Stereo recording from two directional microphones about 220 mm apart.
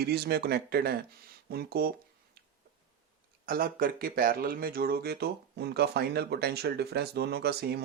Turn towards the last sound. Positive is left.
turn(degrees=-45)  # may be behind; listen again after turning